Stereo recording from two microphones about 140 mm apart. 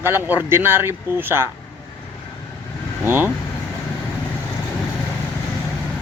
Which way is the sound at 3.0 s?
15° right (ahead or behind).